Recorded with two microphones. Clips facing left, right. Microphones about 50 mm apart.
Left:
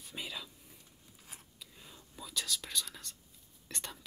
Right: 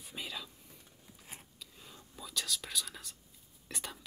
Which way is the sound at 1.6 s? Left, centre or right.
Centre.